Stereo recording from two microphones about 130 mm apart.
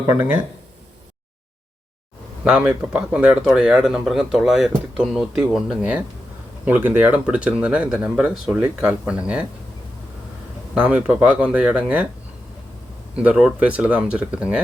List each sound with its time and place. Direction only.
0.1 s speech: 20° right (ahead or behind)
2.4 s speech: 5° right (ahead or behind)
10.8 s speech: 10° right (ahead or behind)
13.2 s speech: 10° right (ahead or behind)